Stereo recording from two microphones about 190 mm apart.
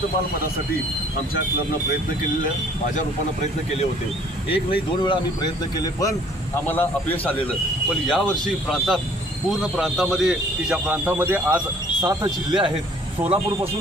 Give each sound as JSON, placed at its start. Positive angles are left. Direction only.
{"t": 4.5, "sound": "a man's voice", "side_deg": 25}
{"t": 12.0, "sound": "speech", "side_deg": -25}